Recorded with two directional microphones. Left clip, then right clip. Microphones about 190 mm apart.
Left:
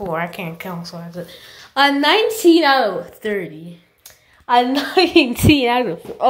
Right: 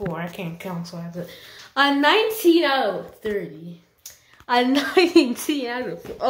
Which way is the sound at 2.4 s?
30° left (ahead or behind).